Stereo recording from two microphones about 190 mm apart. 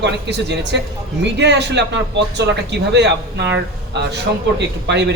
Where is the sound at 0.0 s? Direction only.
65° right (ahead or behind).